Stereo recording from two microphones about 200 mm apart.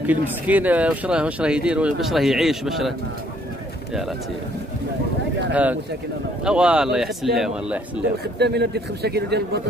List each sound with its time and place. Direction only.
0.0 s speech: 10° right (ahead or behind)
5.5 s speech: 5° right (ahead or behind)
8.4 s a man's voice: 55° right (ahead or behind)